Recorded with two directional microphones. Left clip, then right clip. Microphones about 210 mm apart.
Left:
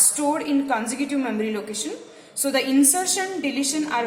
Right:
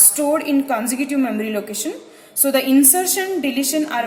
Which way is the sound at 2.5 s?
40° right (ahead or behind).